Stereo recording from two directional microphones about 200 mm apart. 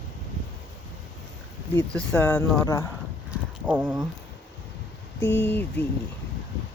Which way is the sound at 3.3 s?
10° right (ahead or behind).